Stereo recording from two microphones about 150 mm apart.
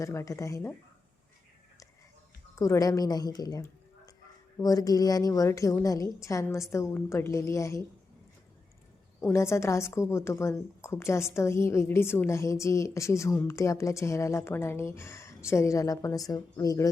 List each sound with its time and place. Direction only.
0.0 s a woman's voice: 20° left (ahead or behind)
2.6 s a woman's voice: 20° left (ahead or behind)
9.2 s a woman's voice: 20° left (ahead or behind)